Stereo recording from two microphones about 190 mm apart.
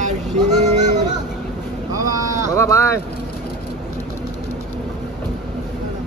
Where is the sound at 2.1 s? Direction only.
15° right (ahead or behind).